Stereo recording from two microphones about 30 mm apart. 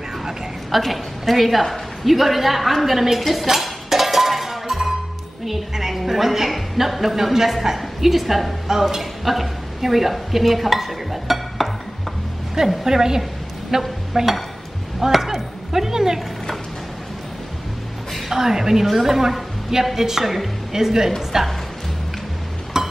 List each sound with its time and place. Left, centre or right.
0.7 s a woman's voice: centre
3.4 s cowbell: centre
5.5 s a woman's voice: centre
12.8 s a woman's voice: centre
18.3 s a woman's voice: centre
22.7 s a sound: centre